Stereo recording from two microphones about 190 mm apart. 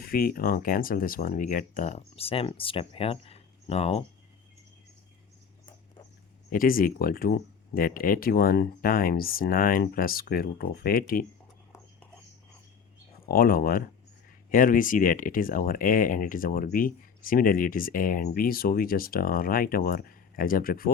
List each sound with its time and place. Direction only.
0.0 s speech: 50° left (ahead or behind); by 4.0 s 35° left (ahead or behind)
6.5 s speech: 50° left (ahead or behind)
13.2 s speech: 50° left (ahead or behind)